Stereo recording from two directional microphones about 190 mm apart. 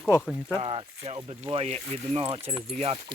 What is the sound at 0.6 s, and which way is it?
Speech, 30° right (ahead or behind).